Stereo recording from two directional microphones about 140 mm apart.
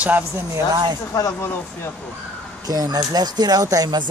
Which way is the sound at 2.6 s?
25° right (ahead or behind).